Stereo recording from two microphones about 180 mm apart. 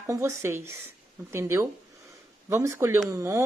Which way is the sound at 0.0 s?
15° right (ahead or behind).